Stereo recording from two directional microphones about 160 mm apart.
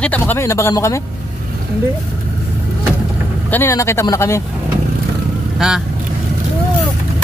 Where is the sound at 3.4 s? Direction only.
15° left (ahead or behind).